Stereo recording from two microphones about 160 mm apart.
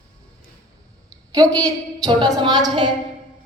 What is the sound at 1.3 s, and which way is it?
A woman's voice, 20° right (ahead or behind).